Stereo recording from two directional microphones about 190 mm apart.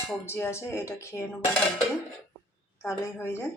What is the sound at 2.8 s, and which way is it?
Speech, 15° left (ahead or behind).